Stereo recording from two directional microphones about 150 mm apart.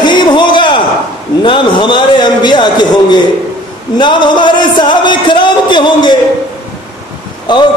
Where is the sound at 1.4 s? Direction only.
30° left (ahead or behind).